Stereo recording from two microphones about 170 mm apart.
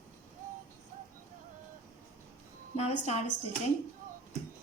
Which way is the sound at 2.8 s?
40° left (ahead or behind).